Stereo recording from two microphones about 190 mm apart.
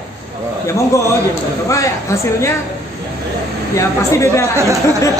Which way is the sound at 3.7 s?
15° left (ahead or behind).